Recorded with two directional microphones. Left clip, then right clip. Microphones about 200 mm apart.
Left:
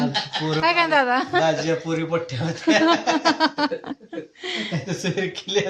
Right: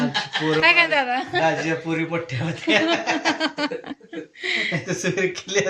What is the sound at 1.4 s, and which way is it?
A man's voice, 65° left (ahead or behind).